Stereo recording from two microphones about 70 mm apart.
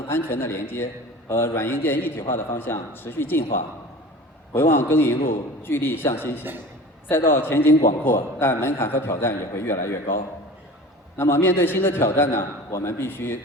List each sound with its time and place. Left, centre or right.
0.1 s a man's voice: left
4.5 s a man's voice: left
11.2 s a man's voice: left